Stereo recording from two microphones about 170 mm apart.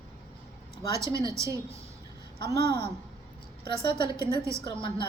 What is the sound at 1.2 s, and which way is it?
Speech, 20° right (ahead or behind).